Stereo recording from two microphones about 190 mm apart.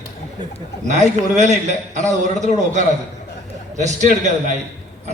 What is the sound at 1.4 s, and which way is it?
A man's voice, 40° right (ahead or behind).